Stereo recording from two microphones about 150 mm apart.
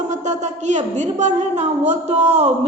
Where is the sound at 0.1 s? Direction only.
50° right (ahead or behind).